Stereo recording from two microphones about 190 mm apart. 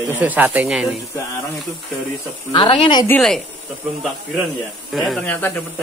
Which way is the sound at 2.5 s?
25° left (ahead or behind).